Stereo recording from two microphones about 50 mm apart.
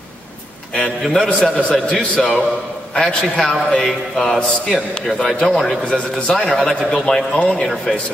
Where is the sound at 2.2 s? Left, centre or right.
Centre.